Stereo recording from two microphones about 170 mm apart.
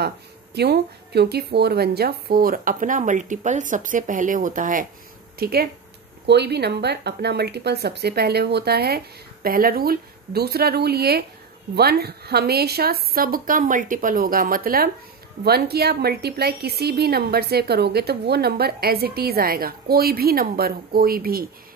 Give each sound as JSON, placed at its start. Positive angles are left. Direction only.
{"t": 0.6, "sound": "a woman's voice", "side_deg": -75}
{"t": 5.4, "sound": "a woman's voice", "side_deg": -65}
{"t": 6.2, "sound": "a woman's voice", "side_deg": -80}